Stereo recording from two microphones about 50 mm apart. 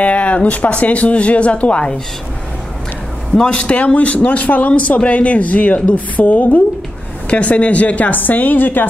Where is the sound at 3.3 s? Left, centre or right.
Centre.